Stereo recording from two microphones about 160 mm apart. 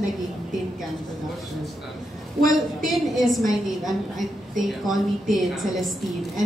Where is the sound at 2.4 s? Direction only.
Centre (ahead or behind).